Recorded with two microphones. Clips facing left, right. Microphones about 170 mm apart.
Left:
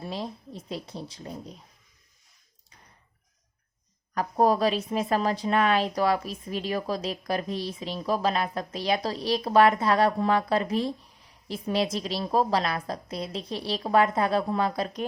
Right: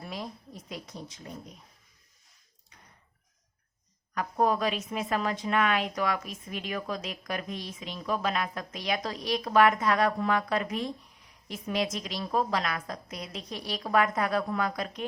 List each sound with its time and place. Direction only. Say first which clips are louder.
0.0 s speech: left 4 dB; 30° left (ahead or behind)
4.1 s a woman's voice: left 4 dB; 35° left (ahead or behind)